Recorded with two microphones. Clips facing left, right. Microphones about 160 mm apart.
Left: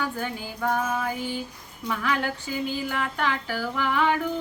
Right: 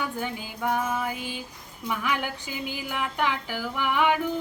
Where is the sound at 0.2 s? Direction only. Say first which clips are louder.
Left 1 dB; 15° right (ahead or behind).